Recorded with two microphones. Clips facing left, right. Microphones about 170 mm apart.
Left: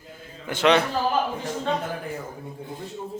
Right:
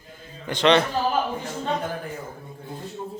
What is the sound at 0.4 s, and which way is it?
Speech, 5° left (ahead or behind).